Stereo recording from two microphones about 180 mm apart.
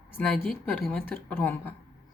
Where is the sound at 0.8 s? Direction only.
5° left (ahead or behind).